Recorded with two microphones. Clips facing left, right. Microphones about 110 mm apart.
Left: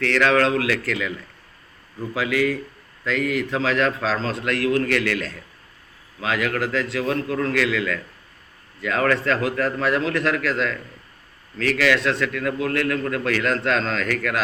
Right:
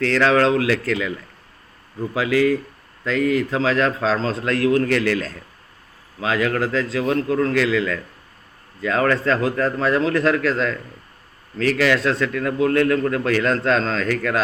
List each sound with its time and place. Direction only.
0.0 s a man's voice: 30° right (ahead or behind)
2.1 s a man's voice: 25° right (ahead or behind)